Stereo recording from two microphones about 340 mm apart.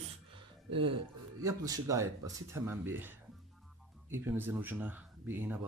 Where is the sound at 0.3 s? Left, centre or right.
Centre.